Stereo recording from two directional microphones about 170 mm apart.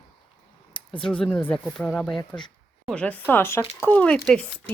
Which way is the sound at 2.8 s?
5° left (ahead or behind).